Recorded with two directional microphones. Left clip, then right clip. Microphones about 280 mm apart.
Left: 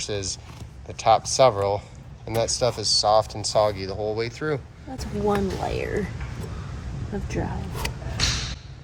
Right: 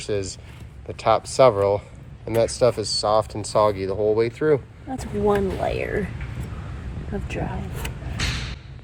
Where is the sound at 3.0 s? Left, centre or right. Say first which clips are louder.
Left 3 dB; centre.